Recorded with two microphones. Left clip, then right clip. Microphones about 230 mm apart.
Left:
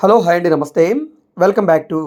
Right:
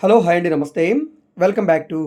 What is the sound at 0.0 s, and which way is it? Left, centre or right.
Speech, centre.